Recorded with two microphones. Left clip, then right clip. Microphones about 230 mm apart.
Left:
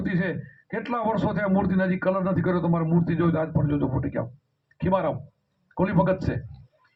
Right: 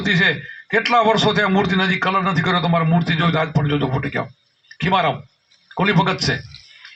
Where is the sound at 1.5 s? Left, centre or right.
Right.